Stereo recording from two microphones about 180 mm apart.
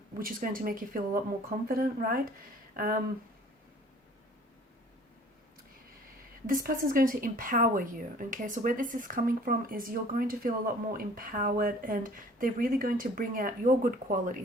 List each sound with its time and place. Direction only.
0.2 s speech: 50° right (ahead or behind)
6.5 s speech: 50° right (ahead or behind)